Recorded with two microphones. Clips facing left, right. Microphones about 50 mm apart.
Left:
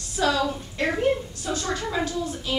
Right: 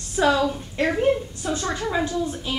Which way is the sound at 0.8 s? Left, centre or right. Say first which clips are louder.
Right 2 dB; centre.